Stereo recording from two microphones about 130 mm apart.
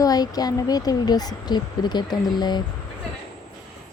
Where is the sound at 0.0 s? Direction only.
30° left (ahead or behind).